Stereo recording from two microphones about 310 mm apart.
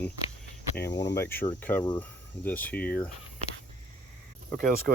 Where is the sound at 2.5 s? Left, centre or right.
Centre.